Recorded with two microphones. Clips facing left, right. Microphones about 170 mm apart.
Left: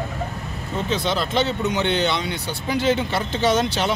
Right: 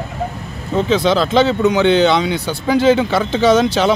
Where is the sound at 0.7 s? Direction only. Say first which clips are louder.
Right 9 dB; 90° right.